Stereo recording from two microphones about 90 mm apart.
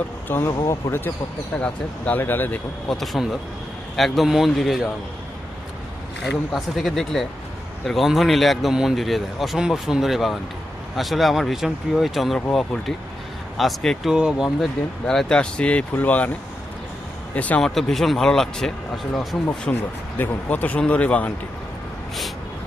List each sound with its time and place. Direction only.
0.3 s speech: 25° left (ahead or behind)
1.5 s speech: 15° left (ahead or behind)
2.9 s a man's voice: centre (ahead or behind)
6.5 s a man's voice: centre (ahead or behind)
13.6 s a man's voice: 5° left (ahead or behind)
17.3 s speech: 15° left (ahead or behind)
17.6 s a man's voice: 5° left (ahead or behind)
19.7 s speech: 20° left (ahead or behind)